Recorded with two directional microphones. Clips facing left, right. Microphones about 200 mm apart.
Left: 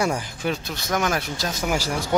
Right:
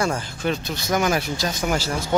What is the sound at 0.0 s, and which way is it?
Speech, 15° left (ahead or behind).